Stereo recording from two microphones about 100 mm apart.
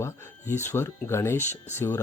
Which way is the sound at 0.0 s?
25° left (ahead or behind).